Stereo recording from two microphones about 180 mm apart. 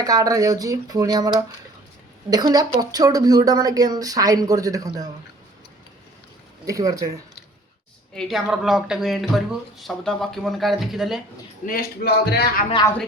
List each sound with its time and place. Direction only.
0.0 s speech: 20° right (ahead or behind)
6.7 s speech: 20° right (ahead or behind)
8.1 s speech: centre (ahead or behind)
11.6 s a man's voice: 55° left (ahead or behind)